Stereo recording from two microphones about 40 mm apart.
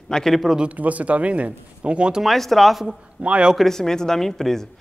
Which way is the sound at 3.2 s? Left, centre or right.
Right.